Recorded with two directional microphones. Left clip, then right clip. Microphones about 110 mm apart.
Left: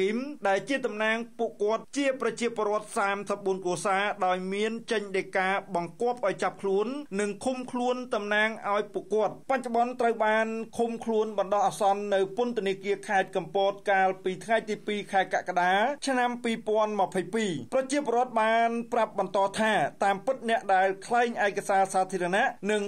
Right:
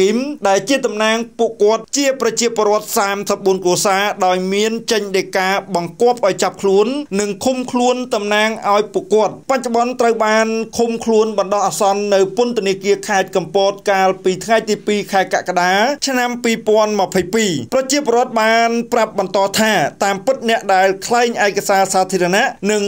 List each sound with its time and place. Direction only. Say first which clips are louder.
0.0 s speech: right 13 dB; 20° right (ahead or behind)
18.7 s speech: right 13 dB; 20° right (ahead or behind)
18.9 s speech: right 10 dB; 30° right (ahead or behind)